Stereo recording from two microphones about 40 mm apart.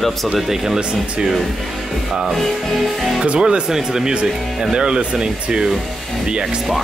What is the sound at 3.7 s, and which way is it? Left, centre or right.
Speech, centre.